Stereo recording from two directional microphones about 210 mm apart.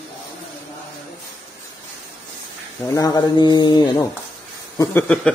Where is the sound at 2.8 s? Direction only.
15° left (ahead or behind).